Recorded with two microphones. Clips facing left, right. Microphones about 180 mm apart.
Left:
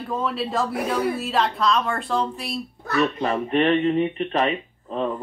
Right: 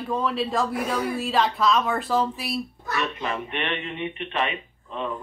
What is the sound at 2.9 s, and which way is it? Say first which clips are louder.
Speech: left 6 dB; 35° left (ahead or behind).